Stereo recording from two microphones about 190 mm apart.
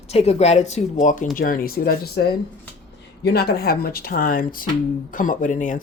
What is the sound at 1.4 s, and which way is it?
Speech, 50° left (ahead or behind).